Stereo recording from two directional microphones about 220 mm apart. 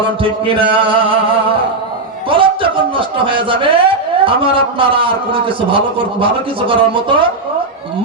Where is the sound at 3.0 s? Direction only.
25° right (ahead or behind).